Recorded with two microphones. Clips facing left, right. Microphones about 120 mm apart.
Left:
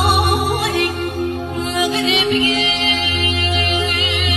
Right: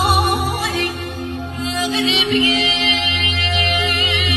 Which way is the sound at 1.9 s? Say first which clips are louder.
Left 1 dB; 45° left (ahead or behind).